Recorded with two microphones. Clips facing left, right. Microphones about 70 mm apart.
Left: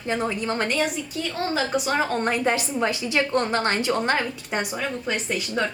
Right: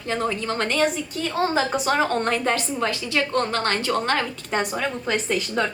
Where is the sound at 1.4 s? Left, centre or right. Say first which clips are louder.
Right 2 dB; right.